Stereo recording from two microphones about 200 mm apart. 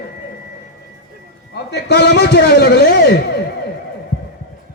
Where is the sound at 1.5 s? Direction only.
55° left (ahead or behind).